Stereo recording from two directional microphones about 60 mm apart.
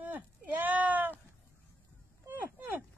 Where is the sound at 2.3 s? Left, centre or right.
Right.